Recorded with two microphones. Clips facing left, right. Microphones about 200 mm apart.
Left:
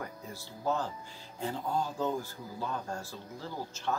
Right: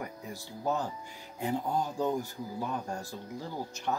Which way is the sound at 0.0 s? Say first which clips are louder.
Right 2 dB; 15° right (ahead or behind).